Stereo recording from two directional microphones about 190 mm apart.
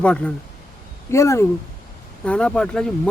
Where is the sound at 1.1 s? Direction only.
15° left (ahead or behind).